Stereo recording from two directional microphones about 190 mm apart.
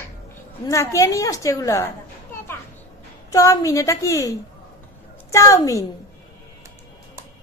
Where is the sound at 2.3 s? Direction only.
10° left (ahead or behind).